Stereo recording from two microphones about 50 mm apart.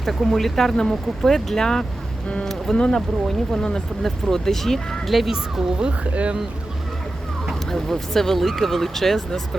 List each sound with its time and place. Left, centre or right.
0.0 s speech: centre
5.1 s speech: centre
5.8 s speech: right
7.7 s speech: centre